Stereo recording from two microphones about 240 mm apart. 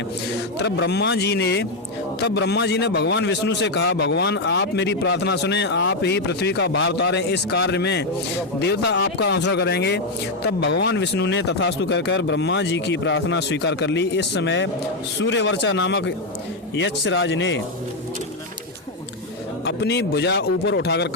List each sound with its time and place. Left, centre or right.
0.6 s a man's voice: left
19.6 s a man's voice: left